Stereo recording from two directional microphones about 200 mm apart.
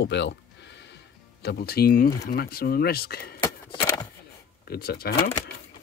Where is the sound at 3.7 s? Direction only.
15° left (ahead or behind).